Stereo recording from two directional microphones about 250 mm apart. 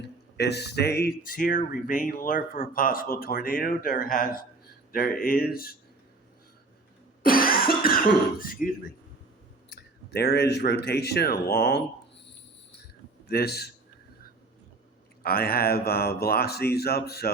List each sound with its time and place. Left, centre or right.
0.3 s speech: left
7.2 s cough: left
9.6 s a sound: left
10.8 s speech: left
13.2 s a man's voice: left
15.2 s speech: left